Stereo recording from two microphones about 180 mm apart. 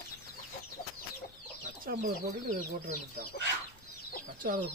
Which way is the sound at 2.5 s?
65° right (ahead or behind).